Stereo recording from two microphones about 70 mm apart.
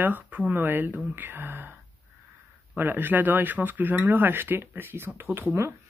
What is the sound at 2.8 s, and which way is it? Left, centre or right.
Speech, right.